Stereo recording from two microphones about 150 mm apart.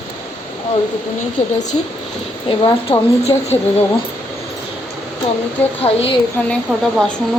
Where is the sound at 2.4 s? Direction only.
35° left (ahead or behind).